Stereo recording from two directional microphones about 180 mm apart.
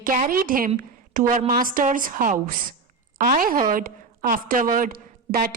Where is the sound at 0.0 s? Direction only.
50° right (ahead or behind).